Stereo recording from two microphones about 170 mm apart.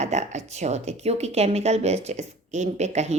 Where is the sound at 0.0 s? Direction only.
40° right (ahead or behind).